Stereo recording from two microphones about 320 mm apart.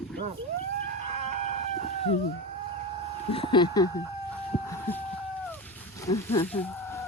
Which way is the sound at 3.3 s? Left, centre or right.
Centre.